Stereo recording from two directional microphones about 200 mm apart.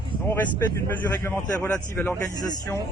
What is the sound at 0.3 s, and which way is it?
Speech, 10° left (ahead or behind).